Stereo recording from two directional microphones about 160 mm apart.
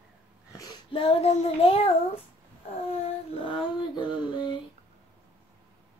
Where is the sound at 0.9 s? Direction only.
40° left (ahead or behind).